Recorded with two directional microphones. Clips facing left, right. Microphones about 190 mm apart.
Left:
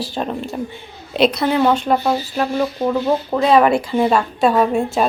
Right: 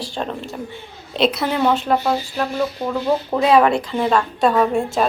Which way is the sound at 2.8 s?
20° left (ahead or behind).